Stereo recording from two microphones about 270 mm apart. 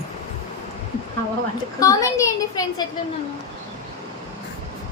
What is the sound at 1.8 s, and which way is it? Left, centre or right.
A child's voice, centre.